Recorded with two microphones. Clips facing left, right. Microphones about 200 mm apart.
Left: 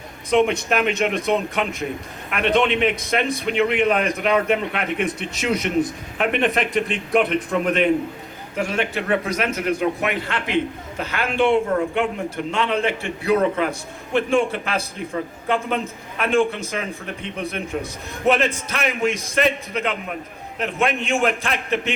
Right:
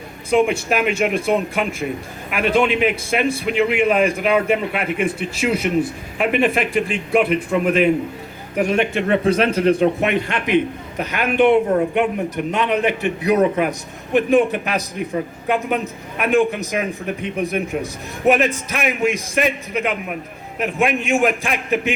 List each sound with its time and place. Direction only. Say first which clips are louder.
0.3 s a man's voice: right 1 dB; 5° right (ahead or behind)
8.5 s a man's voice: right 5 dB; 20° right (ahead or behind)